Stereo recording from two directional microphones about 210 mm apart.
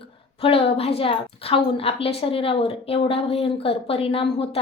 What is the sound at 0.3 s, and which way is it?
A woman's voice, 25° left (ahead or behind).